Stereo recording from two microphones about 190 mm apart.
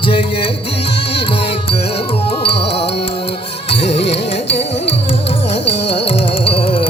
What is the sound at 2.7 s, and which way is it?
Music, 30° left (ahead or behind).